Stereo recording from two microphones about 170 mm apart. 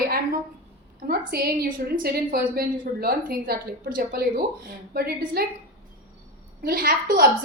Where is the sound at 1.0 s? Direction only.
65° right (ahead or behind).